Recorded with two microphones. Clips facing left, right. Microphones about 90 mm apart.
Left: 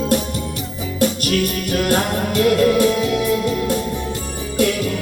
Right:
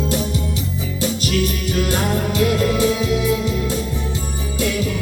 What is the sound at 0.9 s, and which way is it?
Music, 55° left (ahead or behind).